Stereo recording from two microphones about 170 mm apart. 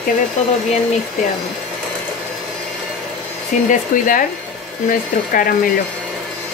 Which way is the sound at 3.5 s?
45° left (ahead or behind).